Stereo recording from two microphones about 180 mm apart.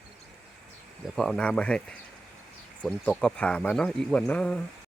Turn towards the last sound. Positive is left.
turn(degrees=5)  # may be behind; listen again after turning